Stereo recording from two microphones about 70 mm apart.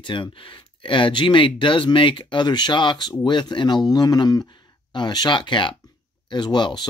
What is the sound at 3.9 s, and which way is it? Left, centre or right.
Speech, left.